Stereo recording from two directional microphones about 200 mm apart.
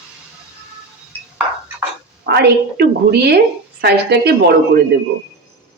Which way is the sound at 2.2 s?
55° right (ahead or behind).